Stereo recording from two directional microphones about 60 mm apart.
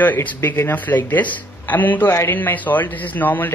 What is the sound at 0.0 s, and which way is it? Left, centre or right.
Speech, left.